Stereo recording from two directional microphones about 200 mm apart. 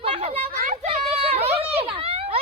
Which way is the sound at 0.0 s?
30° right (ahead or behind).